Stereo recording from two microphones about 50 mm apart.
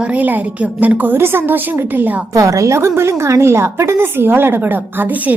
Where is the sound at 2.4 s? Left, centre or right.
Right.